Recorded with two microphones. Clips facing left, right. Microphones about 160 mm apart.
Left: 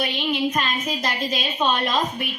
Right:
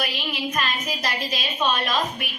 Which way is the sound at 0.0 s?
30° left (ahead or behind).